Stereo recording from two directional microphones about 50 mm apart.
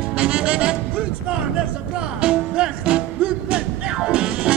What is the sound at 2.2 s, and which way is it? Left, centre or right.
Music, centre.